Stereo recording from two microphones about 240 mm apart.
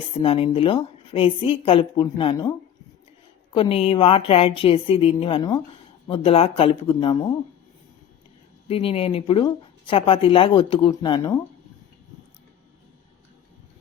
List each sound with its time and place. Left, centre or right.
0.2 s a woman's voice: left
8.6 s a woman's voice: left